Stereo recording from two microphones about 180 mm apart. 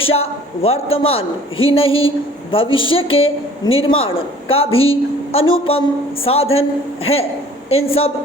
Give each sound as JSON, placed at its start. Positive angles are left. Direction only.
{"t": 0.0, "sound": "a man's voice", "side_deg": 35}